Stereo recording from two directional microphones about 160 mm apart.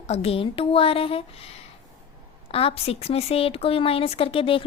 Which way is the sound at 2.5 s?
35° left (ahead or behind).